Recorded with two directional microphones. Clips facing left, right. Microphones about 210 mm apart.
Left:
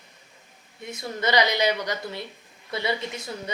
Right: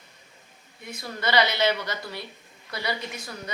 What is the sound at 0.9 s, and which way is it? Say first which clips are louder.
A woman's voice: left 2 dB; 20° left (ahead or behind).